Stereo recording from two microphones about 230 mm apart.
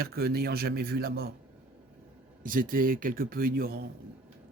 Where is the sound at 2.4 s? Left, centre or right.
Right.